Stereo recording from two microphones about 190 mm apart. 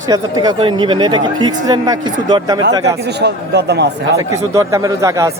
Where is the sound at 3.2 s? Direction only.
60° right (ahead or behind).